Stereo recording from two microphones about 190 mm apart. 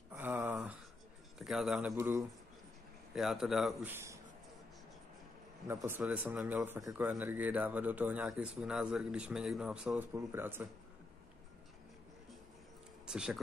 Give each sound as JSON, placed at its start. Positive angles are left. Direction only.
{"t": 0.1, "sound": "a sound", "side_deg": -10}
{"t": 1.4, "sound": "a man's voice", "side_deg": 0}
{"t": 2.0, "sound": "a man's voice", "side_deg": -15}
{"t": 3.2, "sound": "speech", "side_deg": 0}
{"t": 5.7, "sound": "a man's voice", "side_deg": -10}
{"t": 13.0, "sound": "a sound", "side_deg": -5}